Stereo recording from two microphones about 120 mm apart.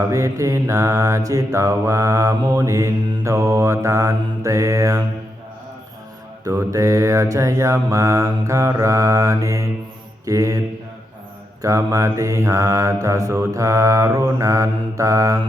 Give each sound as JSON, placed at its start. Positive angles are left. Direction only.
{"t": 0.0, "sound": "mantra", "side_deg": -25}
{"t": 6.4, "sound": "mantra", "side_deg": -25}
{"t": 11.6, "sound": "mantra", "side_deg": -25}